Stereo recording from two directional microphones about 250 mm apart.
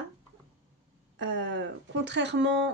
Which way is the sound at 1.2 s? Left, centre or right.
Right.